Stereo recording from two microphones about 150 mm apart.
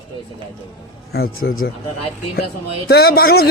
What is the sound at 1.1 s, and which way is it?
Speech, 90° left.